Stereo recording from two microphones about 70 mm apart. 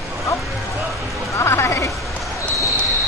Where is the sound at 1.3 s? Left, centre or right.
Left.